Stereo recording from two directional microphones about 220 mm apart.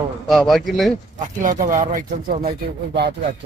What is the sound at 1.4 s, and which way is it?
Speech, 35° right (ahead or behind).